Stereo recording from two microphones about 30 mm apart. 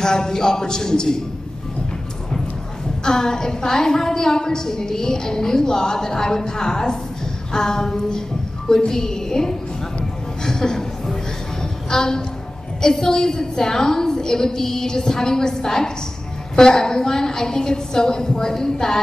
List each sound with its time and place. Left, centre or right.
0.0 s a woman's voice: left
3.0 s a woman's voice: left
10.4 s a sound: left
12.8 s a woman's voice: left